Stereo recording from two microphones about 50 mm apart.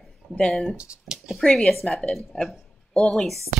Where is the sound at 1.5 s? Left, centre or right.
Centre.